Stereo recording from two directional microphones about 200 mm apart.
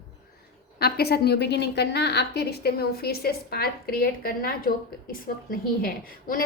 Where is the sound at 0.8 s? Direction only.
50° left (ahead or behind).